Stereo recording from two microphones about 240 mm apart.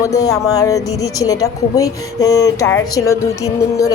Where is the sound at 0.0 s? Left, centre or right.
Centre.